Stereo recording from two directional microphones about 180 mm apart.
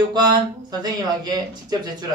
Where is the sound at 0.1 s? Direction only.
20° right (ahead or behind).